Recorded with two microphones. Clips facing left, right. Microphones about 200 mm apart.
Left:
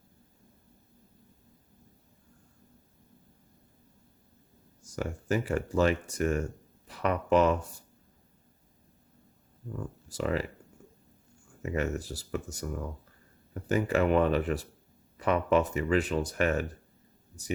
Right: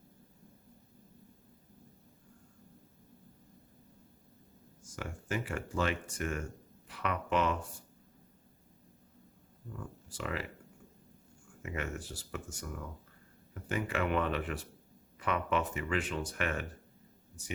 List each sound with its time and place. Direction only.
4.8 s speech: 40° left (ahead or behind)
9.8 s speech: 40° left (ahead or behind)
11.6 s speech: 40° left (ahead or behind)